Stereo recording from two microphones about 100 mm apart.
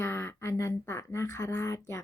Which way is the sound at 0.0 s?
25° left (ahead or behind).